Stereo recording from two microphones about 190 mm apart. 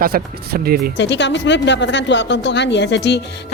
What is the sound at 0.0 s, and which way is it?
Speech, 55° right (ahead or behind).